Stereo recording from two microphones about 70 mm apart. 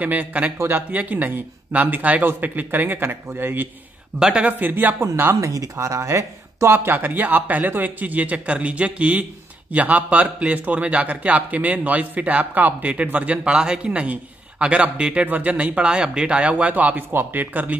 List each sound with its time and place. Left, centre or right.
0.0 s a man's voice: right
4.2 s a man's voice: centre
5.0 s a man's voice: right